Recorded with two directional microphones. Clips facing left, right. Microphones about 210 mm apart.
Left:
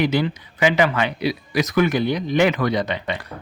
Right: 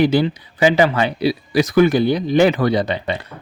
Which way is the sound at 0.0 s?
30° right (ahead or behind).